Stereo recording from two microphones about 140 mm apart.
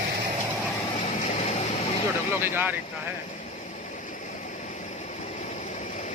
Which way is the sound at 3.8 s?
65° left (ahead or behind).